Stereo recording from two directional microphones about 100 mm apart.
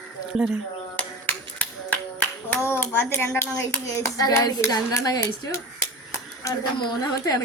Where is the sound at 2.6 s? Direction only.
20° left (ahead or behind).